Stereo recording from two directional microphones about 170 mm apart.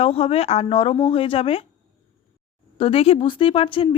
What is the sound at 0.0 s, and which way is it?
Speech, 35° left (ahead or behind).